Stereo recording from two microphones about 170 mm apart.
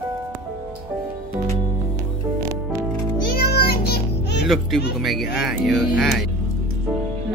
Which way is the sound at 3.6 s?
65° left (ahead or behind).